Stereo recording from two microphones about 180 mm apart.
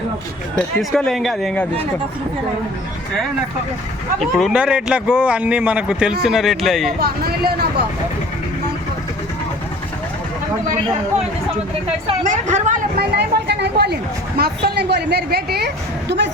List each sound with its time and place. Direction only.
0.5 s a man's voice: centre (ahead or behind)
4.2 s a man's voice: centre (ahead or behind)
7.0 s speech: 60° right (ahead or behind)
12.2 s a woman's voice: 45° right (ahead or behind)
13.0 s speech: 65° right (ahead or behind)